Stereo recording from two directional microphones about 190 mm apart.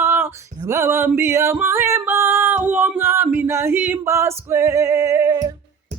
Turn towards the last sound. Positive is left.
turn(degrees=-15)  # may be behind; listen again after turning